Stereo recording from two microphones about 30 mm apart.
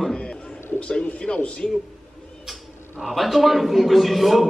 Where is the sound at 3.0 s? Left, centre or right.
Centre.